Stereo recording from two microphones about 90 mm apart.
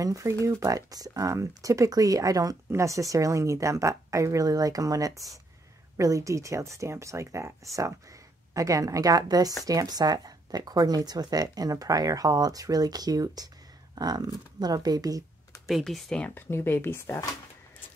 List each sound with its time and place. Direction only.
0.0 s speech: 35° right (ahead or behind)
8.5 s speech: 40° right (ahead or behind)
15.6 s speech: centre (ahead or behind)
16.3 s speech: 25° left (ahead or behind)